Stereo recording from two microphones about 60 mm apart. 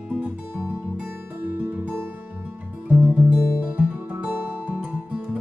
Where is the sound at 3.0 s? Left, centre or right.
Right.